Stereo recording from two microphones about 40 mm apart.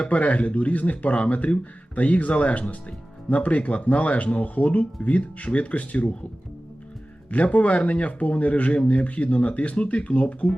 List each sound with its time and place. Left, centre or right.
0.0 s speech: left
7.3 s speech: left